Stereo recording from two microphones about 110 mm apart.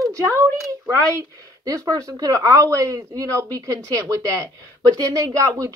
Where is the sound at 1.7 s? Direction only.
30° right (ahead or behind).